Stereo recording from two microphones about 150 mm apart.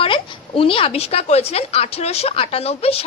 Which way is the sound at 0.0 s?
35° left (ahead or behind).